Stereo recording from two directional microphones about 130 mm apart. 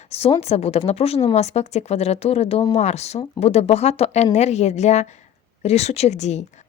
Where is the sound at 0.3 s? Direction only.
55° left (ahead or behind).